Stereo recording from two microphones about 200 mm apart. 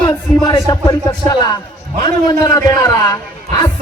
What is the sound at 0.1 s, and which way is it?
Speech, 15° left (ahead or behind).